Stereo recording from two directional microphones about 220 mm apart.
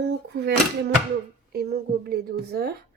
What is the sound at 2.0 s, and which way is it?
Speech, 45° right (ahead or behind).